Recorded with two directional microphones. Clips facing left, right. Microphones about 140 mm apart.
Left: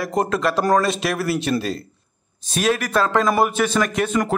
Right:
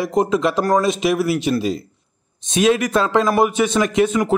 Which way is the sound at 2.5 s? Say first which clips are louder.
Right 4 dB; 20° right (ahead or behind).